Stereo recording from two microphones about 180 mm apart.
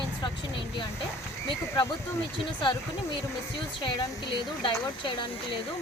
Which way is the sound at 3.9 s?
25° left (ahead or behind).